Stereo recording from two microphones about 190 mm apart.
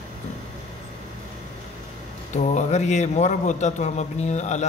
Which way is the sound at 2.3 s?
40° left (ahead or behind).